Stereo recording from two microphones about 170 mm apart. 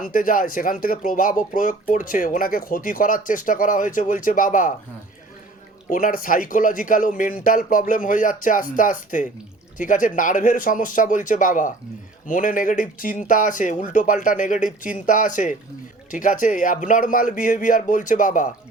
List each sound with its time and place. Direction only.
0.0 s speech: 55° left (ahead or behind)
5.9 s speech: 55° left (ahead or behind)